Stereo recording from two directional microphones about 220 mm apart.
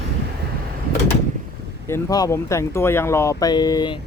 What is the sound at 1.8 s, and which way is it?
Speech, 15° left (ahead or behind).